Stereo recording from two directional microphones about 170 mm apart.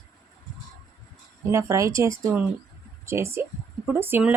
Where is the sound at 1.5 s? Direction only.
15° right (ahead or behind).